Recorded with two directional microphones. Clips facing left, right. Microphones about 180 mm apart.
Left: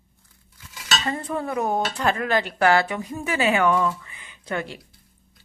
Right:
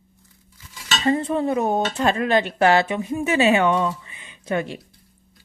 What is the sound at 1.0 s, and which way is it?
Speech, 25° right (ahead or behind).